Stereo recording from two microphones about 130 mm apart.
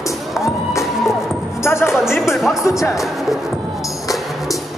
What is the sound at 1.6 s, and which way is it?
Music, 20° left (ahead or behind).